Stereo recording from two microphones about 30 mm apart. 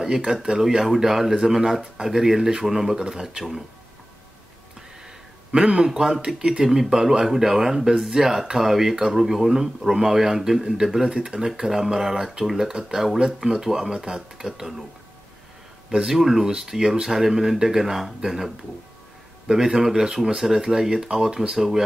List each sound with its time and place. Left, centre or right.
0.0 s speech: centre
5.5 s speech: right
5.9 s speech: right
11.1 s speech: right
11.4 s speech: centre
13.9 s speech: right
16.1 s speech: centre
20.3 s speech: centre